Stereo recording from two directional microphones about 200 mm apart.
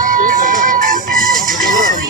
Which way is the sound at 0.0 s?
45° right (ahead or behind).